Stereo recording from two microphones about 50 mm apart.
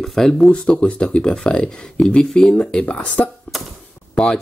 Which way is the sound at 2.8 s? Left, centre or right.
Left.